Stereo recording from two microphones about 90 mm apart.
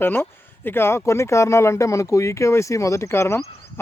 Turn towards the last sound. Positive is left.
turn(degrees=30)  # may be behind; listen again after turning